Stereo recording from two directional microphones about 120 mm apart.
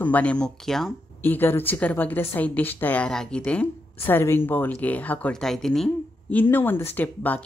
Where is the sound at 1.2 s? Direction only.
15° left (ahead or behind).